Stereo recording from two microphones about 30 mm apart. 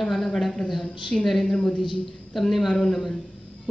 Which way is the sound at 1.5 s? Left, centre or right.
Left.